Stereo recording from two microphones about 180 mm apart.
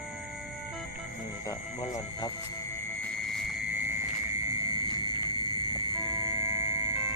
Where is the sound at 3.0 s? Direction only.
Centre (ahead or behind).